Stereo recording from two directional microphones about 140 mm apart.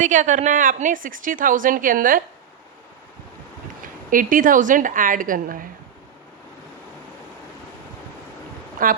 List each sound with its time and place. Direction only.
0.0 s a woman's voice: 65° right (ahead or behind); by 2.2 s 85° right
4.1 s a woman's voice: 75° right (ahead or behind)